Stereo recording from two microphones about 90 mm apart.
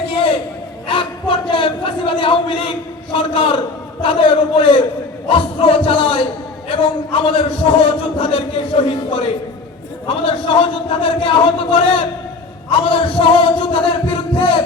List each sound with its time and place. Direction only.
0.9 s a sound: 70° left (ahead or behind)
4.0 s a man's voice: 75° left (ahead or behind)
5.3 s a man's voice: 85° left
12.9 s speech: 75° left (ahead or behind)